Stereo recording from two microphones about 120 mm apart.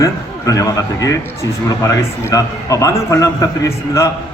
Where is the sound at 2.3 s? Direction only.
30° left (ahead or behind).